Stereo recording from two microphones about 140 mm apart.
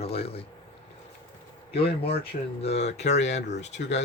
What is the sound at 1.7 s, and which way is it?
Speech, 45° left (ahead or behind).